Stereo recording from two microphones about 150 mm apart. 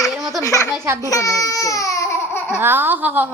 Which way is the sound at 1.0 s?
20° left (ahead or behind).